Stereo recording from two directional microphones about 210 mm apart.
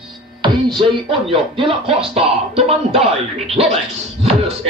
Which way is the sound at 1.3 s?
25° right (ahead or behind).